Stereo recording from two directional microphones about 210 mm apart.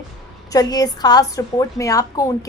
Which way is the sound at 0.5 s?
20° left (ahead or behind).